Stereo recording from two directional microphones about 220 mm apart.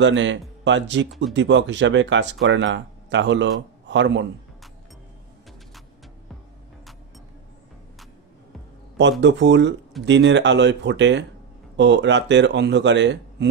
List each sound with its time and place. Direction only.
0.0 s a man's voice: 55° right (ahead or behind)
9.2 s speech: 55° right (ahead or behind)